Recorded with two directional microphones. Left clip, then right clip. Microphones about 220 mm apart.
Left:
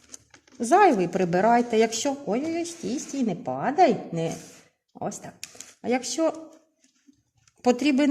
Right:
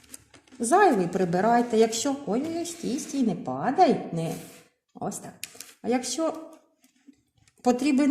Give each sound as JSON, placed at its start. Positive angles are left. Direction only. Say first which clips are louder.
{"t": 0.6, "sound": "a woman's voice", "louder": "left 2 dB", "side_deg": 45}
{"t": 7.6, "sound": "a woman's voice", "louder": "left 1 dB", "side_deg": 45}